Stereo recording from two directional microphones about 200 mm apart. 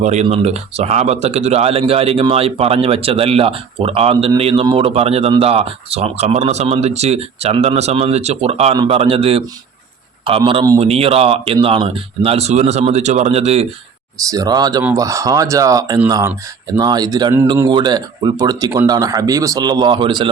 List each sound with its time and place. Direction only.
0.0 s a man's voice: 35° right (ahead or behind)
14.3 s a man's voice: 20° right (ahead or behind)